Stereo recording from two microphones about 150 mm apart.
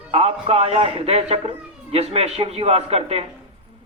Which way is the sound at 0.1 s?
45° right (ahead or behind).